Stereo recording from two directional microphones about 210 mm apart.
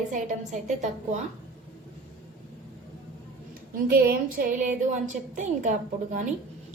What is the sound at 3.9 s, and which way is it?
A woman's voice, 45° right (ahead or behind).